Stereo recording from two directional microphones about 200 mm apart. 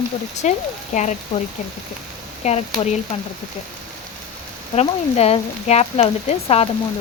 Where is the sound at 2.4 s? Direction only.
35° left (ahead or behind).